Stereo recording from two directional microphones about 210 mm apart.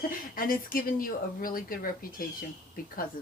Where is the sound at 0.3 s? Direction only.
45° left (ahead or behind).